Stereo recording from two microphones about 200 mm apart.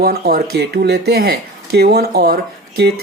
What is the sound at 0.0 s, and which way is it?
Speech, 50° right (ahead or behind).